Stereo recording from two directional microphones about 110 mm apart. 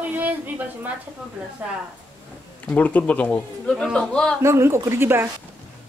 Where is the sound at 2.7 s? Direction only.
15° left (ahead or behind).